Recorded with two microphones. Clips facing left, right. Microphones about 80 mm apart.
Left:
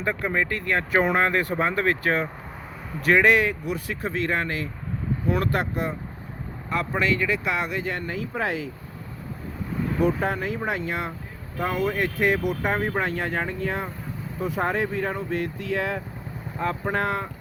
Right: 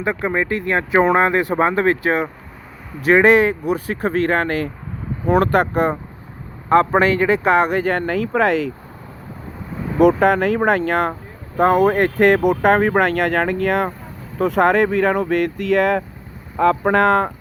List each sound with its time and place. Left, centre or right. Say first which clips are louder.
0.0 s speech: right 5 dB; right
4.1 s speech: right 8 dB; right
10.0 s speech: right 12 dB; right